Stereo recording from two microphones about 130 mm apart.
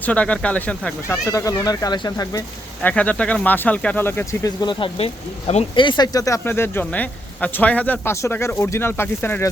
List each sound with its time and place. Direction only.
0.0 s speech: 10° left (ahead or behind); by 2.4 s 30° left (ahead or behind)
2.8 s speech: 10° left (ahead or behind)
4.4 s speech: 35° left (ahead or behind); by 5.6 s 55° left (ahead or behind)
5.7 s speech: 40° left (ahead or behind); by 9.5 s 15° left (ahead or behind)